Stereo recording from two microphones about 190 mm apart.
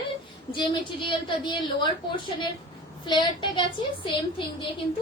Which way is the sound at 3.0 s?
25° left (ahead or behind).